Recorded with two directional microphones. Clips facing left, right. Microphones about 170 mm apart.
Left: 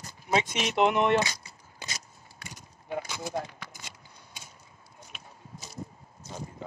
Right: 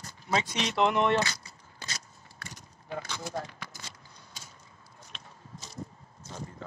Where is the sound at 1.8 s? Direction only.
10° left (ahead or behind).